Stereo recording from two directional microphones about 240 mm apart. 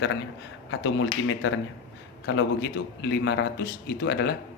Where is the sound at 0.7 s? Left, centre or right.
Left.